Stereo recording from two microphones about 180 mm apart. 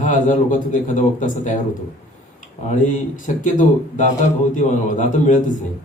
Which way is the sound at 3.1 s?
45° left (ahead or behind).